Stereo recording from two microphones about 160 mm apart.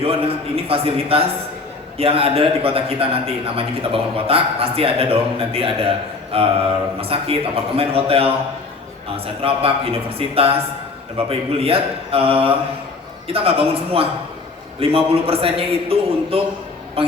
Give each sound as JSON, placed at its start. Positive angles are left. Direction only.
{"t": 0.0, "sound": "a man's voice", "side_deg": -35}